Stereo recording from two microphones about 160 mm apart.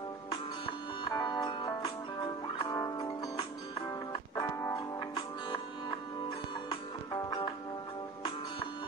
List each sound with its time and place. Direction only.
1.0 s music: 25° left (ahead or behind)
7.2 s music: 25° left (ahead or behind)